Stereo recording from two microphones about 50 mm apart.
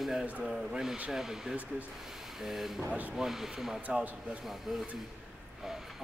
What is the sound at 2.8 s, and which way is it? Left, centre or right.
Speech, right.